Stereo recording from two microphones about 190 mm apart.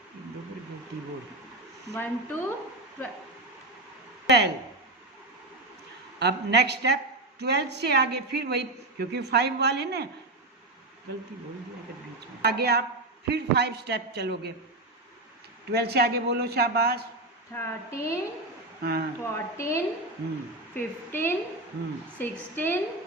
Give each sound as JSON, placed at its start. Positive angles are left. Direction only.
{"t": 1.9, "sound": "speech", "side_deg": 10}
{"t": 4.3, "sound": "a woman's voice", "side_deg": -60}
{"t": 6.1, "sound": "a woman's voice", "side_deg": -60}
{"t": 12.4, "sound": "a woman's voice", "side_deg": -60}
{"t": 15.7, "sound": "a woman's voice", "side_deg": -55}
{"t": 17.5, "sound": "speech", "side_deg": 15}
{"t": 18.8, "sound": "speech", "side_deg": -55}
{"t": 19.2, "sound": "speech", "side_deg": 15}